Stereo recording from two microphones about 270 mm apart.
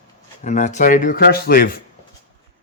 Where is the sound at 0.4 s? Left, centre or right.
Left.